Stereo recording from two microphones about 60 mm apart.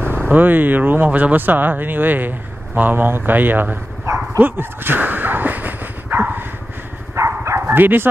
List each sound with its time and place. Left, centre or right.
0.0 s speech: right
4.4 s dog: right
7.2 s bow-wow: right